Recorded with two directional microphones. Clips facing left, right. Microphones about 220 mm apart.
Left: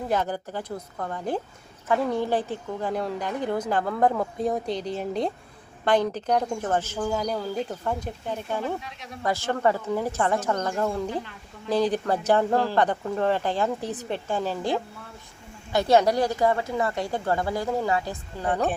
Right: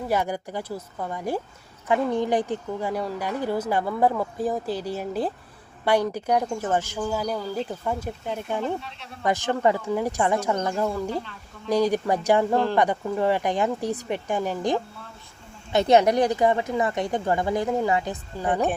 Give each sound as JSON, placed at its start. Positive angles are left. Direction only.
{"t": 0.1, "sound": "speech", "side_deg": -10}
{"t": 8.6, "sound": "speech", "side_deg": 15}
{"t": 9.2, "sound": "a woman's voice", "side_deg": -15}